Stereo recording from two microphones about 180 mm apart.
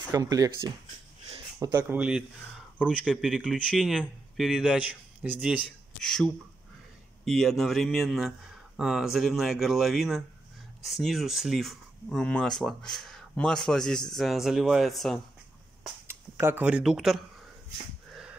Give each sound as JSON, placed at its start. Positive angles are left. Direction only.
{"t": 0.1, "sound": "speech", "side_deg": -20}
{"t": 16.1, "sound": "speech", "side_deg": -15}